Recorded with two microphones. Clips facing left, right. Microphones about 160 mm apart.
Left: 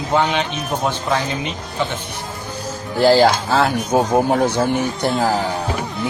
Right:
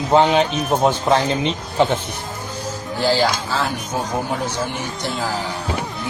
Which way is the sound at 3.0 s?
50° left (ahead or behind).